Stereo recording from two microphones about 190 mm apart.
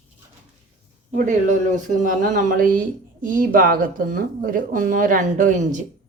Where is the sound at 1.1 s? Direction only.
40° right (ahead or behind).